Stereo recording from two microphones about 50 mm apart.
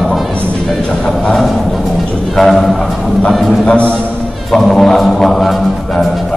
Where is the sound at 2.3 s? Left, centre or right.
Centre.